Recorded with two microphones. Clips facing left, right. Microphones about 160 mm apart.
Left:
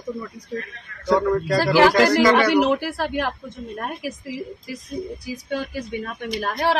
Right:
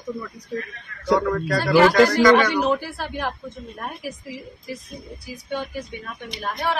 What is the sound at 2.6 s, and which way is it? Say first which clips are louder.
Speech: left 2 dB; 85° left.